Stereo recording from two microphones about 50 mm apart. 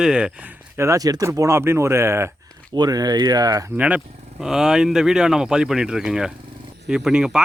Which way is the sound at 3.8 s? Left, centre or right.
Right.